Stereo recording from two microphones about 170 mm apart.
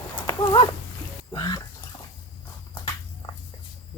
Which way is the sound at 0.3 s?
30° left (ahead or behind).